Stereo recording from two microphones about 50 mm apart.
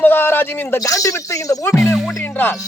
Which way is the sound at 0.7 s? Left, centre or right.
Left.